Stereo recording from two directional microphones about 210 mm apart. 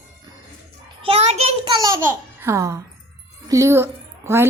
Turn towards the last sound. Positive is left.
turn(degrees=-10)  # may be behind; listen again after turning